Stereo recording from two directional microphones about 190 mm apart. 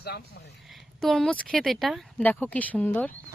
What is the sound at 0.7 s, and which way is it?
Speech, centre (ahead or behind).